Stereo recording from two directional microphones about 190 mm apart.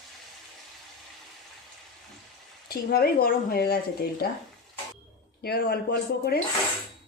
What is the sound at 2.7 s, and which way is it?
Speech, 55° left (ahead or behind).